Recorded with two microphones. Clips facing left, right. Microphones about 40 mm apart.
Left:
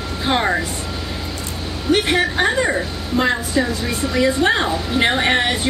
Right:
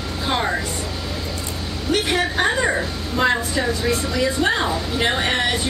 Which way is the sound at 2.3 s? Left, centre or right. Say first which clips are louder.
Left 2 dB; centre.